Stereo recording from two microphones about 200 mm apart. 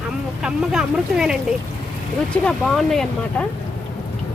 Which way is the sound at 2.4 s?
Centre (ahead or behind).